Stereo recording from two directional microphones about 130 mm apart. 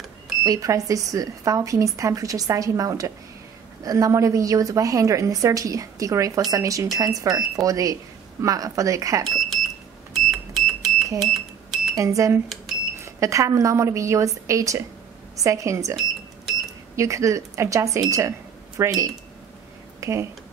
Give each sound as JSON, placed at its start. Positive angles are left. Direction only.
{"t": 0.4, "sound": "speech", "side_deg": -25}
{"t": 10.1, "sound": "a sound", "side_deg": 0}
{"t": 11.3, "sound": "cash register", "side_deg": 0}
{"t": 11.9, "sound": "speech", "side_deg": -25}